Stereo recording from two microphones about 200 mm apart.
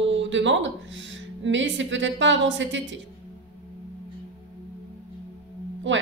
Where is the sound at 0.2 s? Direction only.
65° right (ahead or behind).